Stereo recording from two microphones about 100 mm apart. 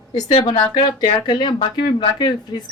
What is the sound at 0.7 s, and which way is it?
Speech, 45° left (ahead or behind).